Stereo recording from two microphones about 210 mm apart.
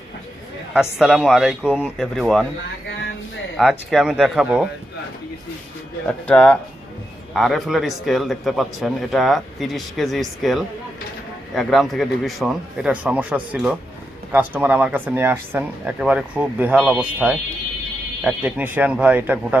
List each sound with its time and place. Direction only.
0.7 s speech: centre (ahead or behind)
3.6 s speech: centre (ahead or behind)
6.1 s speech: 5° left (ahead or behind)